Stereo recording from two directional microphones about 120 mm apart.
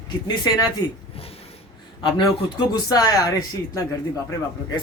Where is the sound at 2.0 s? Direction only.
40° left (ahead or behind).